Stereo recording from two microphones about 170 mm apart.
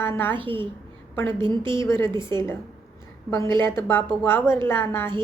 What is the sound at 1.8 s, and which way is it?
Speech, 15° left (ahead or behind).